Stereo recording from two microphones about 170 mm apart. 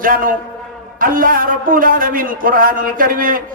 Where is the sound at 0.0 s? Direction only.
55° right (ahead or behind).